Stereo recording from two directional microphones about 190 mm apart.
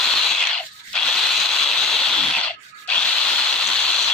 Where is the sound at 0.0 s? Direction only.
5° left (ahead or behind).